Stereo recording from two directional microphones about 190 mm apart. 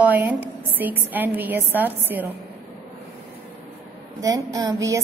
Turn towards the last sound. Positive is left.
turn(degrees=-15)  # may be behind; listen again after turning